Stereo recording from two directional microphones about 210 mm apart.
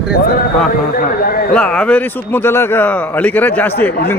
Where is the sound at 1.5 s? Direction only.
5° left (ahead or behind).